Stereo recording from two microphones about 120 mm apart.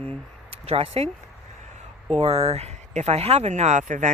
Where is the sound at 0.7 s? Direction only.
55° right (ahead or behind).